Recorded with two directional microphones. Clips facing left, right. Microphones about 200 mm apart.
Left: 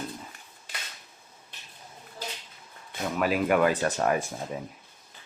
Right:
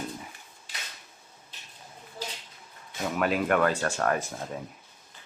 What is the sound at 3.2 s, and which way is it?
Speech, 5° left (ahead or behind).